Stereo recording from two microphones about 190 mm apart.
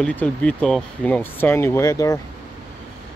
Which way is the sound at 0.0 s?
5° left (ahead or behind).